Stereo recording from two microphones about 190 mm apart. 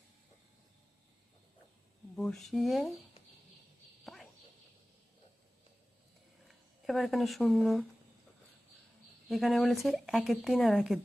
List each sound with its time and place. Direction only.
2.1 s speech: 5° left (ahead or behind)
4.0 s a sound: centre (ahead or behind)
6.5 s speech: centre (ahead or behind)
9.3 s speech: centre (ahead or behind)